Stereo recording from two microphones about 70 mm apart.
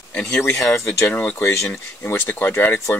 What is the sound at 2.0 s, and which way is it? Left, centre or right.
Speech, left.